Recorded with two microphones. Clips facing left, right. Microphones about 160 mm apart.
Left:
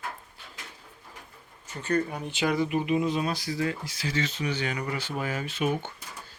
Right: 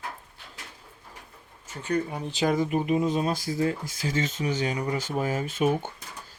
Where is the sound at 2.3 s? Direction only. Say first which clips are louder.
Right 2 dB; 40° right (ahead or behind).